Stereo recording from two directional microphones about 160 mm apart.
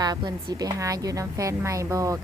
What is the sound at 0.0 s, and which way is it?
A woman's voice, 25° right (ahead or behind).